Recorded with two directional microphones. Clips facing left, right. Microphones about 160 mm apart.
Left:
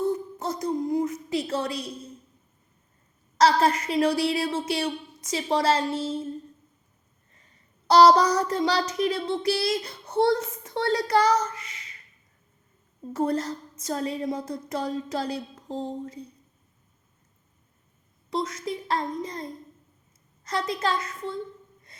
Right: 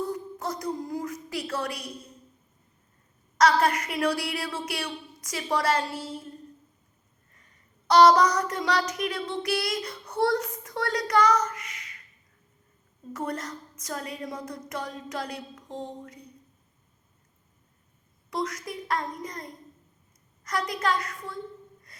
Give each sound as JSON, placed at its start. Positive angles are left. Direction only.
{"t": 0.0, "sound": "a sound", "side_deg": 25}
{"t": 3.3, "sound": "speech", "side_deg": 30}
{"t": 7.3, "sound": "speech", "side_deg": 30}
{"t": 13.1, "sound": "speech", "side_deg": 30}
{"t": 18.3, "sound": "speech", "side_deg": 25}
{"t": 21.9, "sound": "music", "side_deg": 25}